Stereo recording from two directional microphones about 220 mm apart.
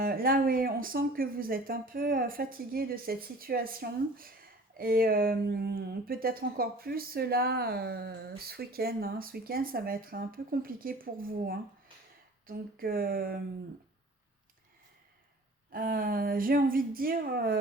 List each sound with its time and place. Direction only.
0.0 s speech: 40° right (ahead or behind)
15.7 s speech: 40° right (ahead or behind)